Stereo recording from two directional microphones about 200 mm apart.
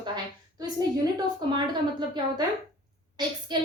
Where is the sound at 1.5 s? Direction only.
25° right (ahead or behind).